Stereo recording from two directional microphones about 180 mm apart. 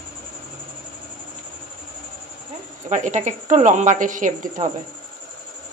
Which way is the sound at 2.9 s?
40° right (ahead or behind).